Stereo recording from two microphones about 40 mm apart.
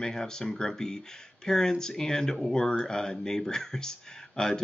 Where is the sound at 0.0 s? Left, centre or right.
Centre.